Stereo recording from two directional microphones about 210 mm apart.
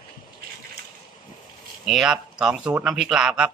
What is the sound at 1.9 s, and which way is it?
Speech, 5° right (ahead or behind).